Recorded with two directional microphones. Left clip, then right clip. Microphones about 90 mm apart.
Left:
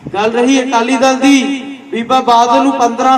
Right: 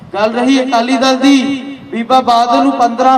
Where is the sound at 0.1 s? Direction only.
45° right (ahead or behind).